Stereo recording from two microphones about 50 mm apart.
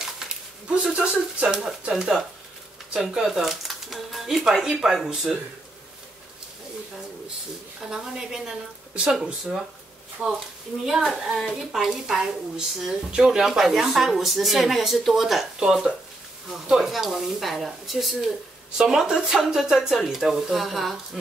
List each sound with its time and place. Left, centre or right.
0.7 s speech: right
1.7 s speech: centre
7.9 s speech: centre
11.1 s speech: centre
18.8 s speech: centre